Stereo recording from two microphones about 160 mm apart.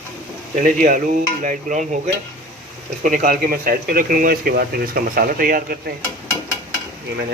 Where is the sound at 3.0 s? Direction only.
55° right (ahead or behind).